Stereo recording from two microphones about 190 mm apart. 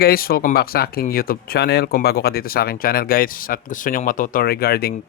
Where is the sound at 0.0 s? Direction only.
50° left (ahead or behind).